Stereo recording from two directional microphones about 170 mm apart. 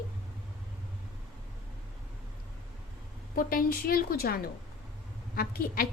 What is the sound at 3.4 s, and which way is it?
A woman's voice, 60° left (ahead or behind).